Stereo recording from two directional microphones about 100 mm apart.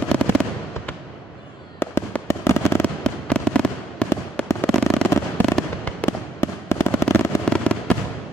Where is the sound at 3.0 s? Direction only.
10° left (ahead or behind).